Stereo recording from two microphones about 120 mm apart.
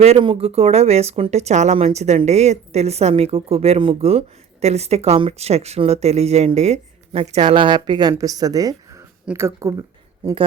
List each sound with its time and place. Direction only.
0.2 s speech: 50° right (ahead or behind)
4.6 s speech: 65° right (ahead or behind)
7.6 s speech: 40° right (ahead or behind)
9.2 s speech: 20° right (ahead or behind)